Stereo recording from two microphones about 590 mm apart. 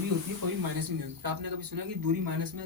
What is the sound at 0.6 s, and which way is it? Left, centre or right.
Speech, right.